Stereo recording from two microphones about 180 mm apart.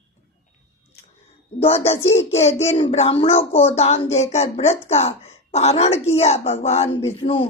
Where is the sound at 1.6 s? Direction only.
35° left (ahead or behind).